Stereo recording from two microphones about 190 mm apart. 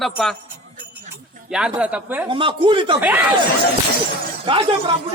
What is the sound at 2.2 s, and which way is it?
Speech, 25° right (ahead or behind).